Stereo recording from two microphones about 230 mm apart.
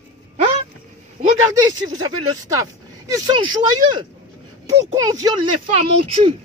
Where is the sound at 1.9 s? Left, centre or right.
Centre.